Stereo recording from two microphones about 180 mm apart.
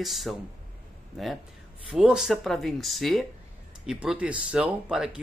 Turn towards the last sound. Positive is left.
turn(degrees=-5)  # may be behind; listen again after turning